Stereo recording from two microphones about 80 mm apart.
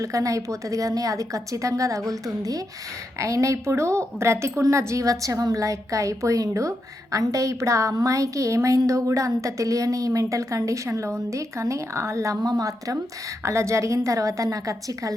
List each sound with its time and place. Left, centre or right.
0.0 s a woman's voice: right
13.4 s a woman's voice: right